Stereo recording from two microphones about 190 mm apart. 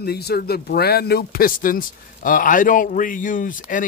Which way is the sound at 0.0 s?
55° left (ahead or behind).